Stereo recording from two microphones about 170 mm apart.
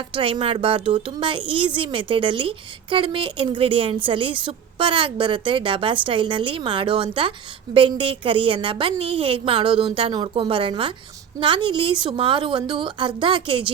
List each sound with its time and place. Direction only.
0.1 s a woman's voice: 30° right (ahead or behind)